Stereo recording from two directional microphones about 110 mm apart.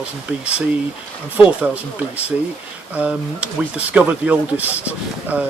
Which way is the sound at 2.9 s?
10° right (ahead or behind).